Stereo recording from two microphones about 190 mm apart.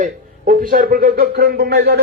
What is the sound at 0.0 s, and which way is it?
A man's voice, 45° right (ahead or behind).